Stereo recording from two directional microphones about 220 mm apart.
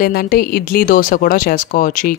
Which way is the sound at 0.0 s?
45° left (ahead or behind).